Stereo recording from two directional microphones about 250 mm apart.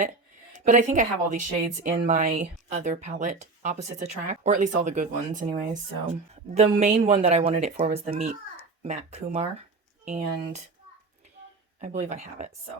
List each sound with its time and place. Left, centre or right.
0.6 s a woman's voice: right
11.8 s a woman's voice: right